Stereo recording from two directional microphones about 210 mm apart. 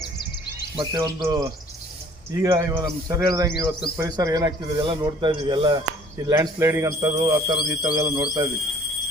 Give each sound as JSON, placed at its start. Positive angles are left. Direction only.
{"t": 0.8, "sound": "a man's voice", "side_deg": -20}